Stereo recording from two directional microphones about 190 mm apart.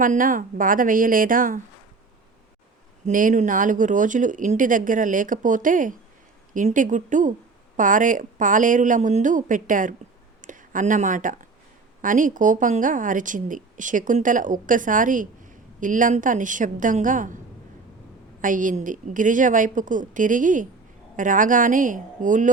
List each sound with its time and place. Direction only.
0.0 s speech: 45° right (ahead or behind)
3.0 s speech: 45° right (ahead or behind)
18.4 s speech: 45° right (ahead or behind)